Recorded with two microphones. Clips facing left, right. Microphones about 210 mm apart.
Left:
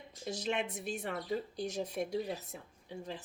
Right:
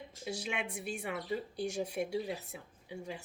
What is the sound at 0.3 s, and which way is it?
Speech, 10° right (ahead or behind).